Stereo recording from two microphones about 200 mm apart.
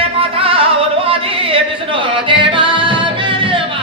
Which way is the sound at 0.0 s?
25° right (ahead or behind).